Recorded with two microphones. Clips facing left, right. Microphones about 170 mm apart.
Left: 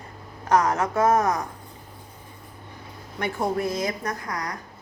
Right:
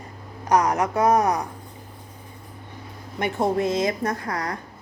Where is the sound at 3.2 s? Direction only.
20° right (ahead or behind).